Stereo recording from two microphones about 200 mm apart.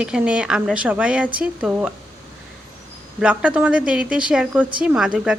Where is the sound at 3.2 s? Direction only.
5° right (ahead or behind).